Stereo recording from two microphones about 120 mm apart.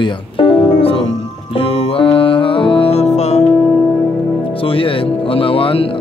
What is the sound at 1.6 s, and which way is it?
Music, 50° left (ahead or behind).